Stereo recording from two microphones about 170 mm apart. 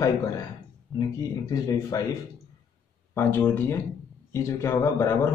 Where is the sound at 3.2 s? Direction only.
10° left (ahead or behind).